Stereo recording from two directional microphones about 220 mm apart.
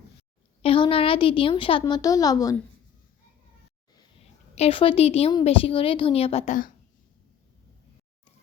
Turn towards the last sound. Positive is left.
turn(degrees=35)  # may be behind; listen again after turning